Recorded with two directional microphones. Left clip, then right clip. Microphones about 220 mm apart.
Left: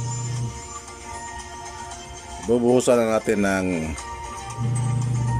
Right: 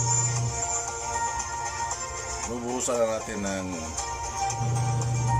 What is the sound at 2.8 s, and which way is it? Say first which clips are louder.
Speech: left 7 dB; 50° left (ahead or behind).